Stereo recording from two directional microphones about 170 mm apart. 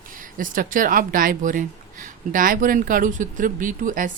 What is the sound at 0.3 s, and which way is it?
Speech, 55° right (ahead or behind).